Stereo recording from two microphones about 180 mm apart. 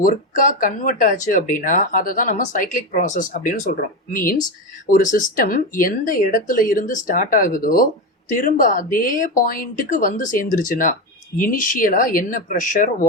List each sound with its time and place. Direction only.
0.0 s speech: 50° left (ahead or behind)